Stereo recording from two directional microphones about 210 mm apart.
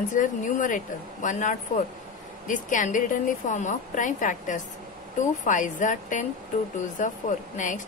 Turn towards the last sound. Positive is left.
turn(degrees=35)  # may be behind; listen again after turning